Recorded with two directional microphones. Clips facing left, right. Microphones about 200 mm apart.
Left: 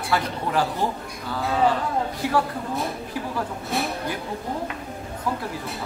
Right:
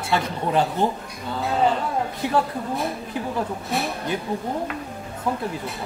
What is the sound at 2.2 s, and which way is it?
Speech, 20° right (ahead or behind).